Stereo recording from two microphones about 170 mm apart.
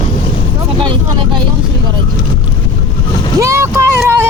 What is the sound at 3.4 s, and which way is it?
Vehicle, 15° right (ahead or behind).